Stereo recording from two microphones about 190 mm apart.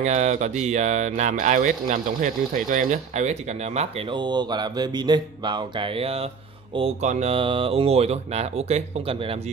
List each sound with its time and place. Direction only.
0.0 s speech: 40° right (ahead or behind)
4.1 s mantra: 25° right (ahead or behind)
6.7 s speech: 35° right (ahead or behind)